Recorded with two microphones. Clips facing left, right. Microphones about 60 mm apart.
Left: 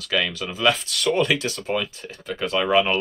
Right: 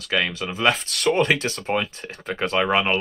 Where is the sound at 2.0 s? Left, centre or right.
Right.